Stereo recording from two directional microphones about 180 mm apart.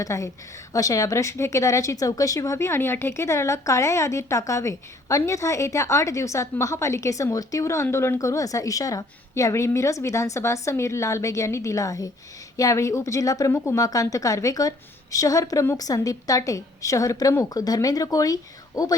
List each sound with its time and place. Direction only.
0.0 s a woman's voice: 15° left (ahead or behind)